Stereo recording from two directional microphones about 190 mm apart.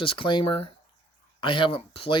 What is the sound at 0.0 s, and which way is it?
Speech, 25° left (ahead or behind).